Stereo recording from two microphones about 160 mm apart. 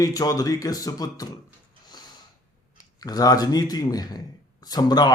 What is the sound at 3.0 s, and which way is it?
A man's voice, 25° left (ahead or behind).